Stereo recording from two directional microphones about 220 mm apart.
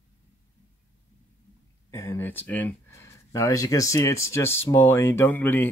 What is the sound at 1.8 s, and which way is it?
Speech, 10° left (ahead or behind).